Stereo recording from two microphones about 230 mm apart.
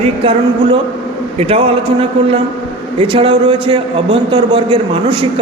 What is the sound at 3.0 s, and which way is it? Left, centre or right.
A man's voice, right.